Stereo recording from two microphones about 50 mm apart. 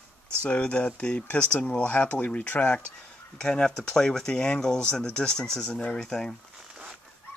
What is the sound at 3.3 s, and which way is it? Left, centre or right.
Speech, centre.